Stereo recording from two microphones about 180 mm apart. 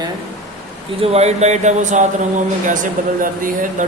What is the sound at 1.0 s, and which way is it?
Speech, 35° right (ahead or behind).